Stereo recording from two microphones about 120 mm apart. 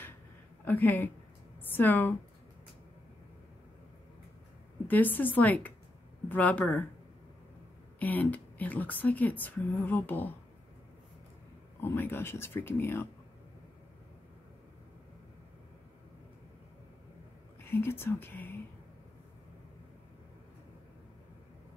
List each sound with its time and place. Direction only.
0.7 s speech: 15° left (ahead or behind)
4.8 s speech: 15° left (ahead or behind)
8.0 s speech: 15° left (ahead or behind)
11.8 s speech: 20° left (ahead or behind)
17.6 s speech: 20° left (ahead or behind)